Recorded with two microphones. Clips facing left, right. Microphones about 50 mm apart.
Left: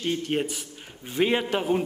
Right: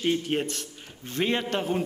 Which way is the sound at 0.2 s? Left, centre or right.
Centre.